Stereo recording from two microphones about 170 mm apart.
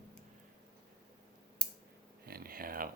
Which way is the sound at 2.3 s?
60° right (ahead or behind).